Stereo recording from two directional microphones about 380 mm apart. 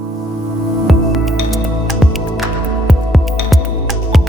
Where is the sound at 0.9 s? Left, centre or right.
Centre.